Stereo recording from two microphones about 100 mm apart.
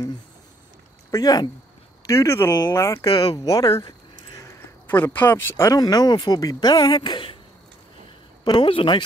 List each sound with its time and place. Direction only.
1.1 s speech: 40° left (ahead or behind)
2.0 s speech: 30° left (ahead or behind)
3.1 s speech: 45° left (ahead or behind)
4.8 s speech: 20° left (ahead or behind)
5.8 s a woman's voice: 40° left (ahead or behind)
8.5 s a woman's voice: 55° left (ahead or behind)